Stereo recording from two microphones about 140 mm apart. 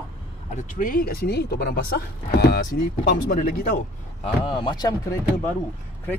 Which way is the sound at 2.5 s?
80° left.